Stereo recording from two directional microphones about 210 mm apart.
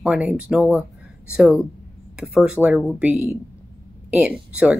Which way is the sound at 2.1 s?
5° right (ahead or behind).